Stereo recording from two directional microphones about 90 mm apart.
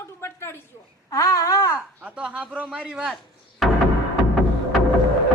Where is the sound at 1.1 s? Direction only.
40° left (ahead or behind).